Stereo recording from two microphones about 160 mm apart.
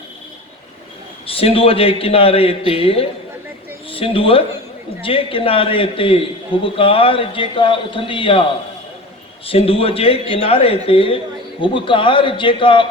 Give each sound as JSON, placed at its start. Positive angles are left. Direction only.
{"t": 1.3, "sound": "a man's voice", "side_deg": 35}
{"t": 9.5, "sound": "a man's voice", "side_deg": 35}